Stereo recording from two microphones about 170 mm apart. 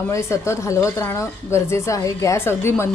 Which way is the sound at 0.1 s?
15° left (ahead or behind).